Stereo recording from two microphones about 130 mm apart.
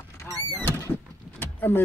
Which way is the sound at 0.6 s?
15° left (ahead or behind).